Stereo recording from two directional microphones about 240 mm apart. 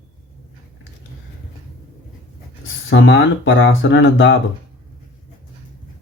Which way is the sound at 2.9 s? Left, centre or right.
Left.